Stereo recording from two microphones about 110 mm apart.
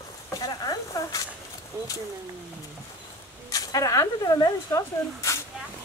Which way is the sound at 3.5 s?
35° left (ahead or behind).